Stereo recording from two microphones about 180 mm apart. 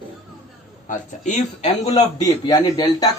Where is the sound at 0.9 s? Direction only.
40° left (ahead or behind).